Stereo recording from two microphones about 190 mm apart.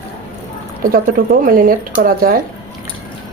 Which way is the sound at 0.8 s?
50° right (ahead or behind).